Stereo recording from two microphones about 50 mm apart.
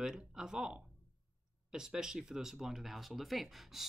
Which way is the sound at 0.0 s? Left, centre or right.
Centre.